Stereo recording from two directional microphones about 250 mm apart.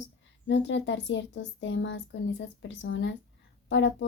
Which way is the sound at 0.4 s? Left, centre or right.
Left.